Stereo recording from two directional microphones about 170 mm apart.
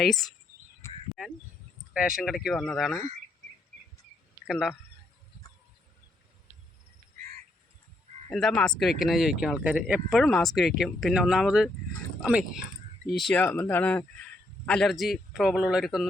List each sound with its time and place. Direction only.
0.0 s speech: centre (ahead or behind)
0.8 s a sound: 15° left (ahead or behind)
1.9 s speech: 5° right (ahead or behind)
4.4 s speech: 5° right (ahead or behind)
8.3 s speech: 5° left (ahead or behind)